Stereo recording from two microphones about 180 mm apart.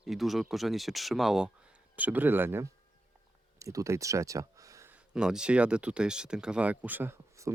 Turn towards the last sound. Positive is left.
turn(degrees=-15)  # may be behind; listen again after turning